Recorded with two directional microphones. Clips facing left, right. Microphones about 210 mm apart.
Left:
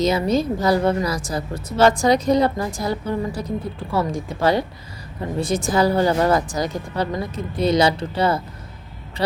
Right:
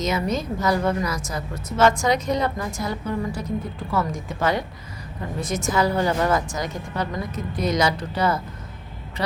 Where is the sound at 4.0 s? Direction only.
30° left (ahead or behind).